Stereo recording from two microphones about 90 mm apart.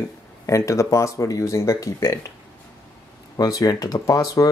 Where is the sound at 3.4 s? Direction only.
40° left (ahead or behind).